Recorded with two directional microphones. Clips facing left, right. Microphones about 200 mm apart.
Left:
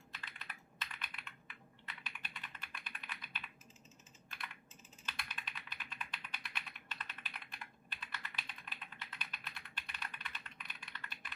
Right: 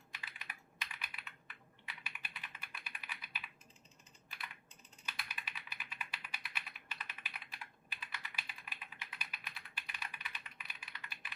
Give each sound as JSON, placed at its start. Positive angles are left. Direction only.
{"t": 0.1, "sound": "computer keyboard", "side_deg": -10}
{"t": 5.0, "sound": "typing", "side_deg": -10}